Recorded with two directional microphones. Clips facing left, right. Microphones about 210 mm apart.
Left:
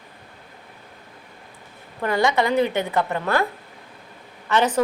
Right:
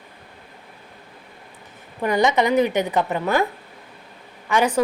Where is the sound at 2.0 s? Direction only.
20° right (ahead or behind).